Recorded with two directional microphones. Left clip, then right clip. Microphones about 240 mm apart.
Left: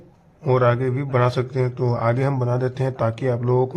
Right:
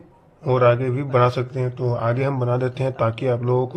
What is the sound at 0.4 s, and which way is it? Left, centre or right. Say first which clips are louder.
Speech: right 2 dB; centre.